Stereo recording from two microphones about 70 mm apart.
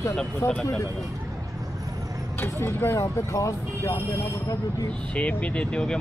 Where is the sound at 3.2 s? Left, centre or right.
Left.